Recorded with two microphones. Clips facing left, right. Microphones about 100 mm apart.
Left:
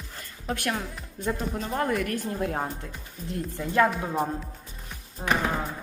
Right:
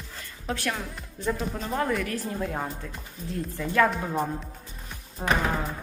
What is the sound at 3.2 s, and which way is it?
Speech, 25° left (ahead or behind).